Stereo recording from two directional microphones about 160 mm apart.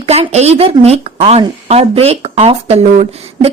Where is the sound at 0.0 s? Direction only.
40° right (ahead or behind).